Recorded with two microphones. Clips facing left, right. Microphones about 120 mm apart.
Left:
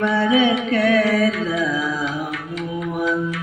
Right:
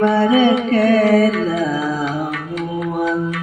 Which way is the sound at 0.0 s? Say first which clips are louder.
Right 4 dB; 35° right (ahead or behind).